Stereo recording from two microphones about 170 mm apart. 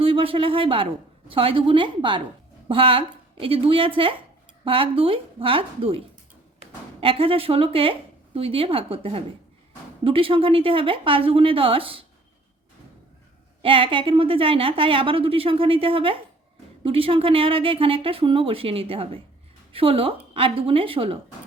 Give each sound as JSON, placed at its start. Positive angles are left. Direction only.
{"t": 0.0, "sound": "a woman's voice", "side_deg": -35}
{"t": 7.0, "sound": "a woman's voice", "side_deg": -30}
{"t": 13.6, "sound": "a woman's voice", "side_deg": -30}